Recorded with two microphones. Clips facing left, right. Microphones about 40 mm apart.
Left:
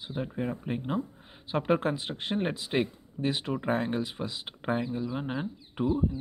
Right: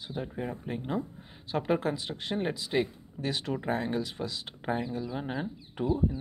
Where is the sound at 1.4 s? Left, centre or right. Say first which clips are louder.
Left 2 dB; left.